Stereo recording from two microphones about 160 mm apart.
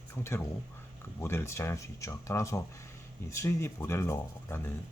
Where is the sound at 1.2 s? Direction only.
15° left (ahead or behind).